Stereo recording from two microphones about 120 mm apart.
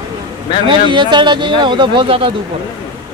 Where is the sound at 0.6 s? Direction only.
40° right (ahead or behind).